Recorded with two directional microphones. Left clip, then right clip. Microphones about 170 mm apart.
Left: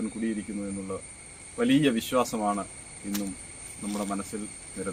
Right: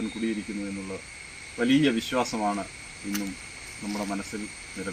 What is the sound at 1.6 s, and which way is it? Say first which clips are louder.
Speech: right 1 dB; 20° left (ahead or behind).